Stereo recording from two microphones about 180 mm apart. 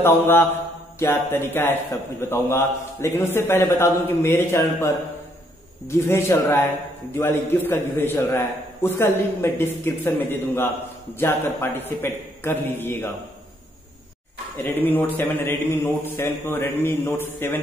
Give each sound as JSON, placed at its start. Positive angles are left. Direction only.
{"t": 0.0, "sound": "speech", "side_deg": 10}
{"t": 14.6, "sound": "speech", "side_deg": 10}